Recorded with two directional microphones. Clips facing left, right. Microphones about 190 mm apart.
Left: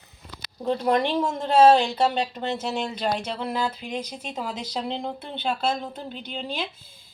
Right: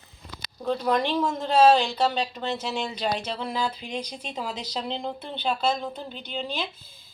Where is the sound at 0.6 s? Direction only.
20° left (ahead or behind).